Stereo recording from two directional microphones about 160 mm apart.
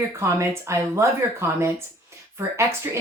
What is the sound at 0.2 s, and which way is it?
Speech, 15° right (ahead or behind).